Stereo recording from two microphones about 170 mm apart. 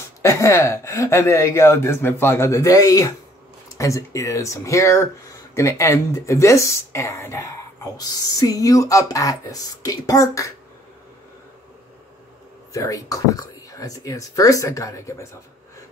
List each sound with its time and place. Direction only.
0.2 s speech: 15° left (ahead or behind)
12.7 s speech: 20° left (ahead or behind)